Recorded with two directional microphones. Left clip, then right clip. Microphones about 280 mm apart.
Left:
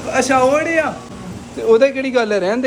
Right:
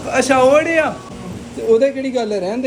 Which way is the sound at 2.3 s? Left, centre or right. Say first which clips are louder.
Left 4 dB; left.